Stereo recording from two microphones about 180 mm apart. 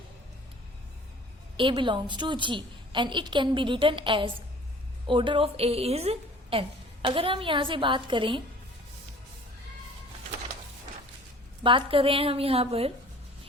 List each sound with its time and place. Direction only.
1.5 s a woman's voice: 30° right (ahead or behind)
11.6 s a woman's voice: 30° right (ahead or behind)